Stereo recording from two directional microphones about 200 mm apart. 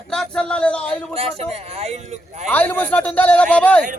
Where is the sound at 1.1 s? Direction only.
30° right (ahead or behind).